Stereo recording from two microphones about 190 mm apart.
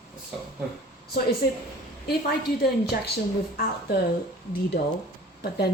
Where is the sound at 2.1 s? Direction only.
55° left (ahead or behind).